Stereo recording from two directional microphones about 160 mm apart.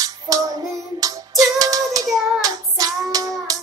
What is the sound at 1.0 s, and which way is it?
Child singing, 20° right (ahead or behind).